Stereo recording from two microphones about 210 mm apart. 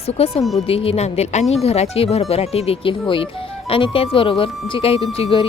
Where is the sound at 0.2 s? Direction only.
30° left (ahead or behind).